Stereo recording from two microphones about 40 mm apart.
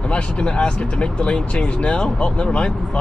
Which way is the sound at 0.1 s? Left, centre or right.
Left.